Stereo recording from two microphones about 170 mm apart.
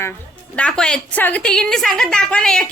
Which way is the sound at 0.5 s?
5° left (ahead or behind).